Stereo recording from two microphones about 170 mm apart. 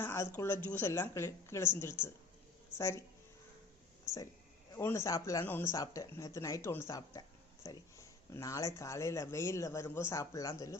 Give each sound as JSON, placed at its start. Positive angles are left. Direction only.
{"t": 0.0, "sound": "speech", "side_deg": 15}
{"t": 4.0, "sound": "a sound", "side_deg": 20}
{"t": 4.7, "sound": "speech", "side_deg": 15}